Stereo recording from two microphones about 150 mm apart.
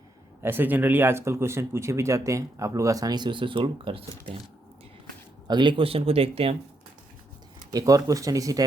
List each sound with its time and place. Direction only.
0.4 s speech: 15° right (ahead or behind); by 4.0 s 35° right (ahead or behind)
5.5 s speech: 30° right (ahead or behind)
7.7 s speech: 25° right (ahead or behind)